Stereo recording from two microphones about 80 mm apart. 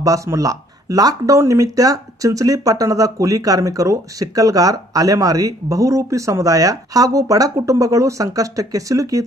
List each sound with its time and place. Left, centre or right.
0.0 s speech: right